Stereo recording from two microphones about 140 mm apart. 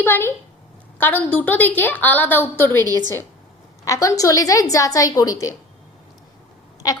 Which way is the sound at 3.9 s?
20° left (ahead or behind).